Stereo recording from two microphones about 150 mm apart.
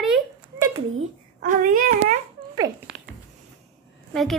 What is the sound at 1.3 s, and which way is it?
Speech, 60° right (ahead or behind).